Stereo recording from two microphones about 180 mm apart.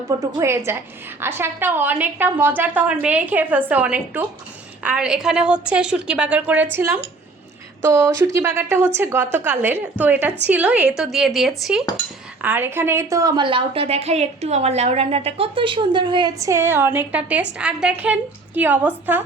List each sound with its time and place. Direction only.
0.2 s a woman's voice: 15° right (ahead or behind)